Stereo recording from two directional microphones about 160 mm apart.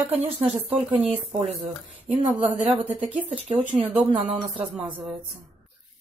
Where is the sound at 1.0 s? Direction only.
40° right (ahead or behind).